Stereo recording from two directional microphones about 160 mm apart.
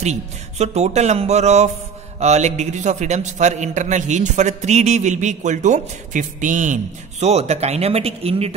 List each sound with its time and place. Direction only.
0.0 s a man's voice: 45° right (ahead or behind)